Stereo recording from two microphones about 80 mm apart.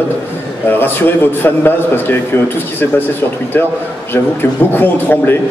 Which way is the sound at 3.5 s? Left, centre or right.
Left.